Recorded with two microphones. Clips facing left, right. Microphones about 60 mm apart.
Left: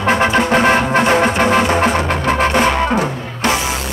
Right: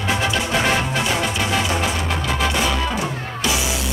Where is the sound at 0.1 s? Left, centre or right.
Left.